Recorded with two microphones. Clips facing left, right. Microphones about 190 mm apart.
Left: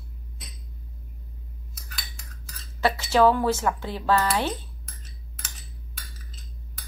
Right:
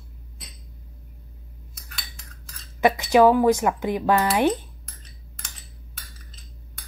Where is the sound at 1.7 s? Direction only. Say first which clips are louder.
Even; centre (ahead or behind).